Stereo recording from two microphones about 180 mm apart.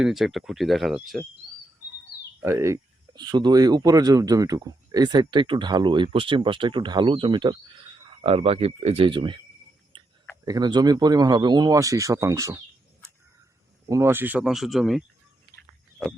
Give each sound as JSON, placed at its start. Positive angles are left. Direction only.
{"t": 0.0, "sound": "speech", "side_deg": 0}
{"t": 2.4, "sound": "speech", "side_deg": -15}
{"t": 9.9, "sound": "clicking", "side_deg": -30}
{"t": 10.4, "sound": "speech", "side_deg": -20}
{"t": 13.8, "sound": "speech", "side_deg": -15}